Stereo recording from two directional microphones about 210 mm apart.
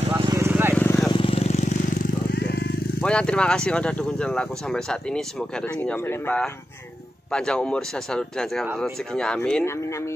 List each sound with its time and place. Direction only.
0.2 s vehicle: 15° right (ahead or behind)
0.7 s vehicle: 10° left (ahead or behind)
1.1 s vehicle: 25° left (ahead or behind)
2.3 s vehicle: 50° left (ahead or behind)
3.0 s speech: 5° left (ahead or behind)